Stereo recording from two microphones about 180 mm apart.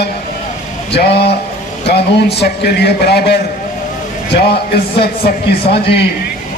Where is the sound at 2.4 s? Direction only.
65° left (ahead or behind).